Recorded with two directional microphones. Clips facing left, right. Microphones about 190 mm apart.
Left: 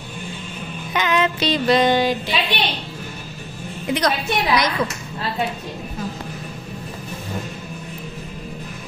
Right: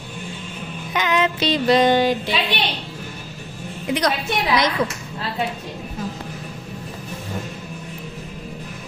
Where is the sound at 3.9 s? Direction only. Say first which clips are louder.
Even; 15° right (ahead or behind).